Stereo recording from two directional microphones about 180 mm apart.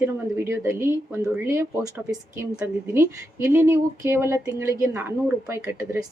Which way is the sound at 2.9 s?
15° right (ahead or behind).